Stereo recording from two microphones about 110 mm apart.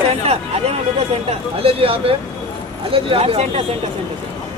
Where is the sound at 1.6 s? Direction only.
60° right (ahead or behind).